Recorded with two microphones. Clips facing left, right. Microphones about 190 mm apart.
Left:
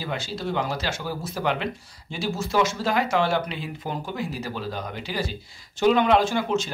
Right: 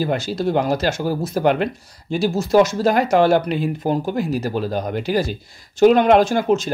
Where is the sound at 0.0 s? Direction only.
45° right (ahead or behind).